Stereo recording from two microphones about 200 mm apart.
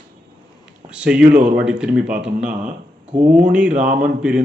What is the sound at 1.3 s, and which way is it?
Speech, 40° right (ahead or behind).